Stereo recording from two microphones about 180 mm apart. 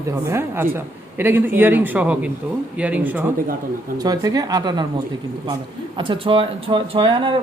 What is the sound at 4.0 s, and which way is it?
Speech, 20° right (ahead or behind).